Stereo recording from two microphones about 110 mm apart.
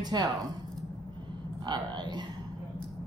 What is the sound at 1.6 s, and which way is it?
Speech, 40° right (ahead or behind).